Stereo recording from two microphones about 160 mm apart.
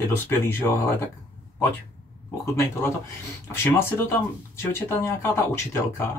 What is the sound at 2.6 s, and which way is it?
Speech, 15° left (ahead or behind).